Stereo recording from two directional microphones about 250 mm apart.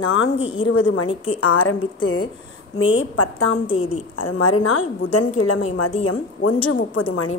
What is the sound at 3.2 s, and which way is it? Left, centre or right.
Speech, left.